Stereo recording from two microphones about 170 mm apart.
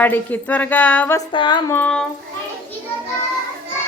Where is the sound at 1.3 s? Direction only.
30° left (ahead or behind).